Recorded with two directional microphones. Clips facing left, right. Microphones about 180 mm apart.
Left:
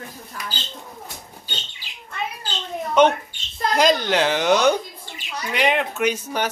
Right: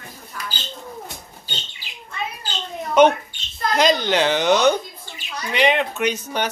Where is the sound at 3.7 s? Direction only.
5° left (ahead or behind).